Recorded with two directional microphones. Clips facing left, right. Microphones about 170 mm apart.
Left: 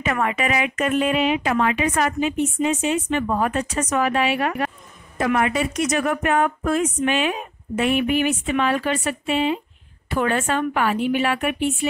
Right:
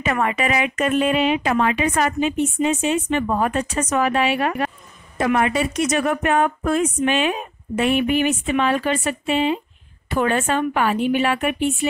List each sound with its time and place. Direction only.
0.0 s speech: 30° right (ahead or behind)